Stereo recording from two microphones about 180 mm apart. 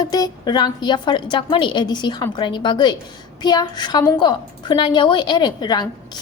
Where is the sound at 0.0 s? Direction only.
20° left (ahead or behind).